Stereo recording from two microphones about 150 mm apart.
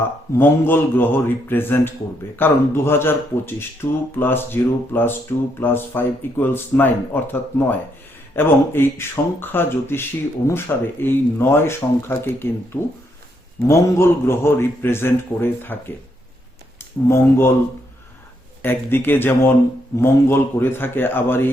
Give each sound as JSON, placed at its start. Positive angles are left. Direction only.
{"t": 0.3, "sound": "speech", "side_deg": 15}
{"t": 8.4, "sound": "speech", "side_deg": 15}
{"t": 17.1, "sound": "speech", "side_deg": 15}
{"t": 18.6, "sound": "speech", "side_deg": 15}